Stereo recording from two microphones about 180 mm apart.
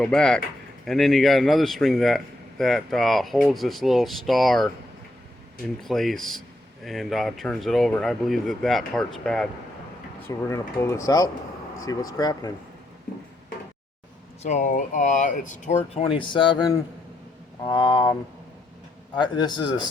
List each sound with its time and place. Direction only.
0.0 s speech: 5° left (ahead or behind)
5.8 s speech: centre (ahead or behind)
10.2 s a man's voice: 15° left (ahead or behind)
14.4 s a man's voice: 40° left (ahead or behind); by 19.8 s 25° left (ahead or behind)